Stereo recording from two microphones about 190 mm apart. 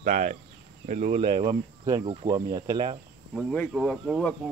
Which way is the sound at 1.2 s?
25° right (ahead or behind).